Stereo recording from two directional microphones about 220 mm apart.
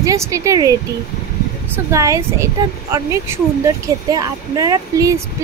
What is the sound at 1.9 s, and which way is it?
A woman's voice, 15° right (ahead or behind).